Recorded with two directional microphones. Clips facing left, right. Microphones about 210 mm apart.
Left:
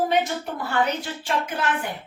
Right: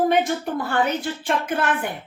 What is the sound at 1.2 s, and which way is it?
Speech, 55° right (ahead or behind).